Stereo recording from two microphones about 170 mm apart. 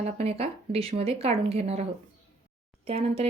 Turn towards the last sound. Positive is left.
turn(degrees=-35)  # may be behind; listen again after turning